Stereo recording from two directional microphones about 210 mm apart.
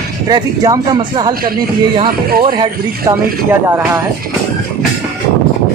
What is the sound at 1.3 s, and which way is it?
Speech, 45° right (ahead or behind).